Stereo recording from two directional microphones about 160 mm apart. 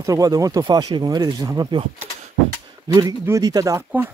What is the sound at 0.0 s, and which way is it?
Speech, 20° right (ahead or behind).